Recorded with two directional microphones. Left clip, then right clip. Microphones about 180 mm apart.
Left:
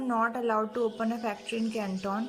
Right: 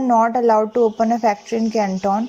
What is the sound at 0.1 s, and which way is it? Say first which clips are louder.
A woman's voice: right 13 dB; 25° right (ahead or behind).